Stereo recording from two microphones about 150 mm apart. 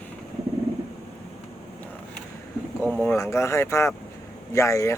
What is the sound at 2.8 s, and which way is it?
A man's voice, 10° left (ahead or behind).